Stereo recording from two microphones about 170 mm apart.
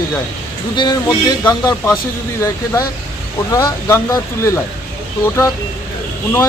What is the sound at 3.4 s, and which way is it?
Speech, 20° left (ahead or behind).